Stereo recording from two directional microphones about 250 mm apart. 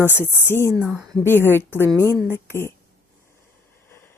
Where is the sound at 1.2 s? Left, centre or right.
Centre.